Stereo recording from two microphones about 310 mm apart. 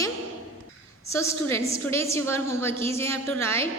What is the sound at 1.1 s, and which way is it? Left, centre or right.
A woman's voice, centre.